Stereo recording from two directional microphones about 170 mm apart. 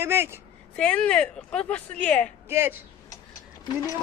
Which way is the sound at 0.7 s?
5° left (ahead or behind).